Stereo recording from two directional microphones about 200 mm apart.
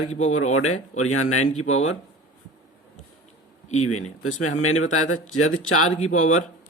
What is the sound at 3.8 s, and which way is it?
Speech, 90° left.